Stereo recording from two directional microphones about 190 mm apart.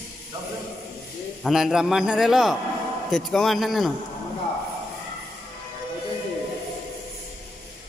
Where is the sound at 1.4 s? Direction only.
Centre (ahead or behind).